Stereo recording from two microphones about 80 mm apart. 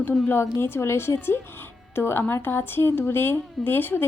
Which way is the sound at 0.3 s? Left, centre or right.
Left.